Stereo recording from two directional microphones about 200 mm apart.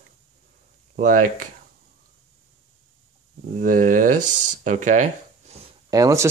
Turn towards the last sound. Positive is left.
turn(degrees=-15)  # may be behind; listen again after turning